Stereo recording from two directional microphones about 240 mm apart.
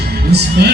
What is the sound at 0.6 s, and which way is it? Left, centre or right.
Music, right.